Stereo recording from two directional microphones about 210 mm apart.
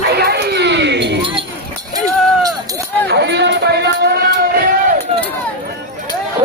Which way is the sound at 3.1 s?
55° right (ahead or behind).